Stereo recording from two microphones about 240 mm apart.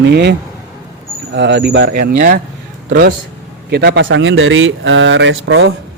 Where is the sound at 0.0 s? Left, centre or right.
Right.